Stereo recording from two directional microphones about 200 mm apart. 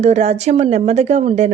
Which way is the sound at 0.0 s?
35° right (ahead or behind).